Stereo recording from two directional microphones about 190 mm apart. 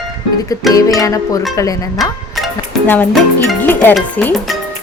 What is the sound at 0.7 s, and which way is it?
Speech, 20° left (ahead or behind).